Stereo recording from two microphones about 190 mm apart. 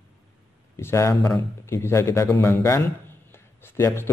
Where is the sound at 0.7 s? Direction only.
15° left (ahead or behind).